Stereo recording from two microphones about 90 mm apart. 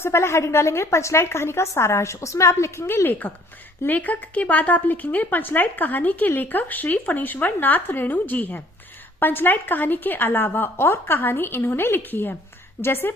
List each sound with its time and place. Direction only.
0.0 s a woman's voice: 30° left (ahead or behind)